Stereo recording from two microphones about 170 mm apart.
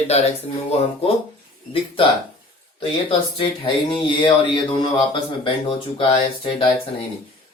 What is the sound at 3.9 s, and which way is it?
Speech, 30° left (ahead or behind).